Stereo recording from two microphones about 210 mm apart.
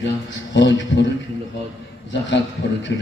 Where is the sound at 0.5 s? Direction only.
60° left (ahead or behind).